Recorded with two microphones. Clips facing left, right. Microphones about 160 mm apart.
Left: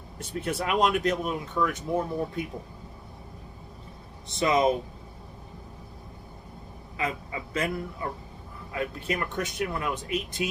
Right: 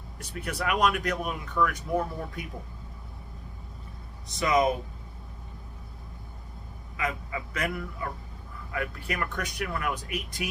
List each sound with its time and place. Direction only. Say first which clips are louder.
0.2 s speech: left 3 dB; 25° left (ahead or behind)
4.3 s speech: left 1 dB; 25° left (ahead or behind)
6.9 s speech: left 1 dB; 30° left (ahead or behind)